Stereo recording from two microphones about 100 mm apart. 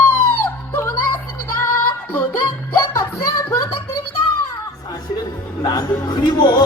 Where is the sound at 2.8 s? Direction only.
30° left (ahead or behind).